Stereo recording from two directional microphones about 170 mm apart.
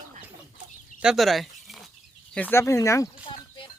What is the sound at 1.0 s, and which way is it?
Dog, centre (ahead or behind).